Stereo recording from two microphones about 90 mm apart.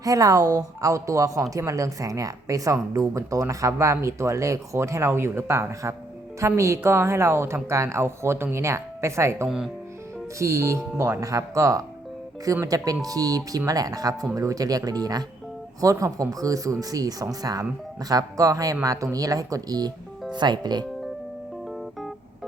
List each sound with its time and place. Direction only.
0.0 s a woman's voice: 40° right (ahead or behind)